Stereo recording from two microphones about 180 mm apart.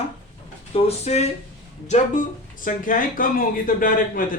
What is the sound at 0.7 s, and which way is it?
Speech, 35° left (ahead or behind).